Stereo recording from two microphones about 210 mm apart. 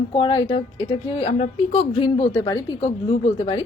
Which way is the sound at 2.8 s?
35° left (ahead or behind).